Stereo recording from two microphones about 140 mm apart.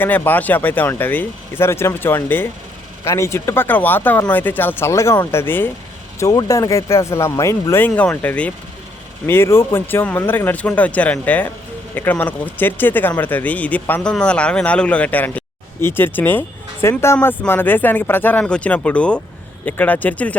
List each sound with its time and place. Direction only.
0.0 s speech: 10° left (ahead or behind)